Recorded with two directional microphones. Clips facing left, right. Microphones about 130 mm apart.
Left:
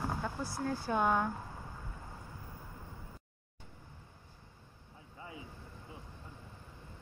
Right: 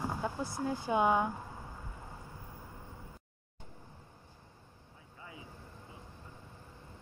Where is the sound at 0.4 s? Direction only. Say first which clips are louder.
Right 1 dB; 20° right (ahead or behind).